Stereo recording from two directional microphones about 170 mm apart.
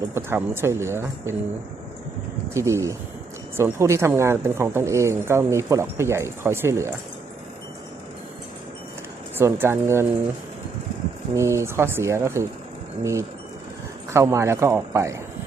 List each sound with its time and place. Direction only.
0.1 s speech: 15° right (ahead or behind)
2.5 s speech: 15° right (ahead or behind)
9.4 s speech: 15° right (ahead or behind)
11.3 s speech: 15° right (ahead or behind)